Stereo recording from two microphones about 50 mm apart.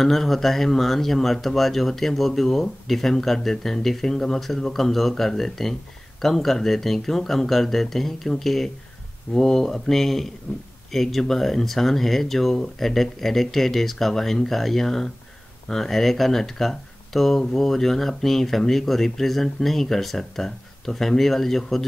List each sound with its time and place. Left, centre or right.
0.0 s speech: centre
10.5 s a man's voice: left
10.9 s speech: centre